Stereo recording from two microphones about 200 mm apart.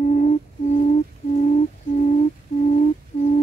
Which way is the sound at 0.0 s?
40° left (ahead or behind).